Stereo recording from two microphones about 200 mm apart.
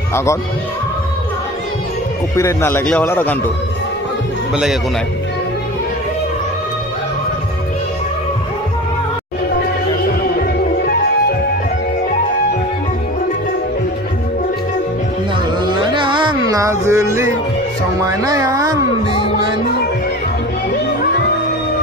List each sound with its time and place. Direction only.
0.1 s a man's voice: 15° left (ahead or behind)
2.3 s a man's voice: 10° left (ahead or behind)
15.9 s music: 25° right (ahead or behind)
18.0 s speech: 15° right (ahead or behind)